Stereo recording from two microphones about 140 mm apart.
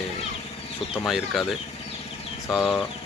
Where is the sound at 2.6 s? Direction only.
15° left (ahead or behind).